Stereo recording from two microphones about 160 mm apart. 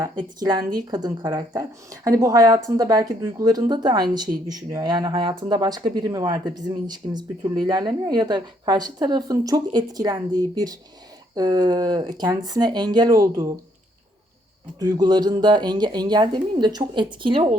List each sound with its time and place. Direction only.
0.0 s speech: 25° right (ahead or behind)
14.8 s speech: 25° right (ahead or behind)